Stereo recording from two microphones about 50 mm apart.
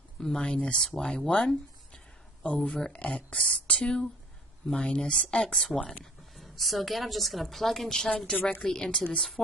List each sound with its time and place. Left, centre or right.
0.2 s speech: centre
6.3 s a woman's voice: centre